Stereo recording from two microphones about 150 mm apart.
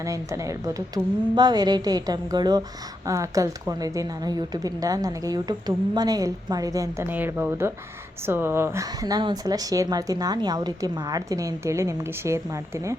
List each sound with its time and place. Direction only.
0.0 s speech: 20° right (ahead or behind)